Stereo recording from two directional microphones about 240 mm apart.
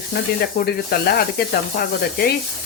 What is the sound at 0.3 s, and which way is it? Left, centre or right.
Speech, left.